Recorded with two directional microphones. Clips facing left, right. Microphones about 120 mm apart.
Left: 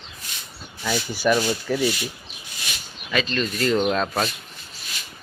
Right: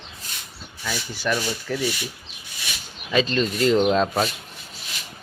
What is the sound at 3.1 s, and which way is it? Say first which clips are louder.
Speech: right 3 dB; 25° right (ahead or behind).